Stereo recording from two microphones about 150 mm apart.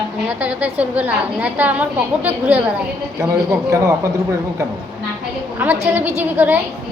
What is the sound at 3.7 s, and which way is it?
Speech, 20° right (ahead or behind).